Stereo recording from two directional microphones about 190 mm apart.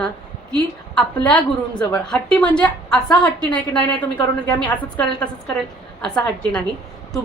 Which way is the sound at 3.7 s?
5° left (ahead or behind).